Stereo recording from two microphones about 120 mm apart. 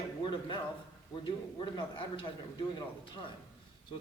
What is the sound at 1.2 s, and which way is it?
A man's voice, 40° left (ahead or behind).